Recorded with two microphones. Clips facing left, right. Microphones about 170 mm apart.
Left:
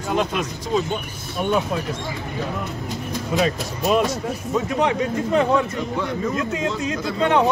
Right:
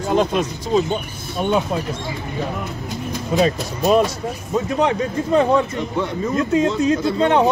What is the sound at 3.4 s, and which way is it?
Speech, 35° right (ahead or behind).